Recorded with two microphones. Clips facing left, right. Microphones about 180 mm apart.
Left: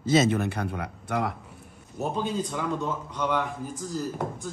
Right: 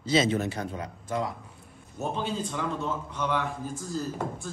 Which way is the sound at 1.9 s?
10° left (ahead or behind).